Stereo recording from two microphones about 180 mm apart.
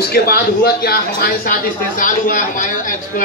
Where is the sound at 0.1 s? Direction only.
60° left (ahead or behind).